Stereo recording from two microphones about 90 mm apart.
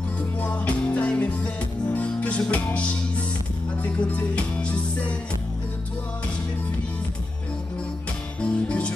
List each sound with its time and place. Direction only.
0.4 s music: 15° left (ahead or behind)
8.4 s music: 15° left (ahead or behind)